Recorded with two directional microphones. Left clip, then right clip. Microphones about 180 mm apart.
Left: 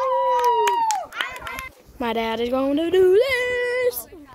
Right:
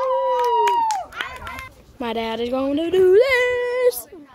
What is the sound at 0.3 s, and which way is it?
Run, 50° left (ahead or behind).